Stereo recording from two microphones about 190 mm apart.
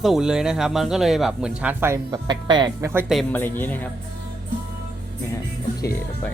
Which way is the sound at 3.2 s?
10° left (ahead or behind).